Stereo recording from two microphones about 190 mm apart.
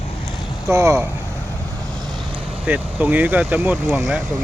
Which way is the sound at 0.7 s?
15° right (ahead or behind).